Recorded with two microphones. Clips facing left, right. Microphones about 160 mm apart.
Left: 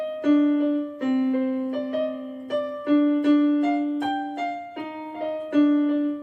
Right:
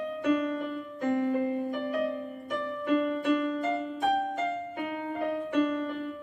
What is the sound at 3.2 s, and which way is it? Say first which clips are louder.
Music: left 9 dB; 35° left (ahead or behind).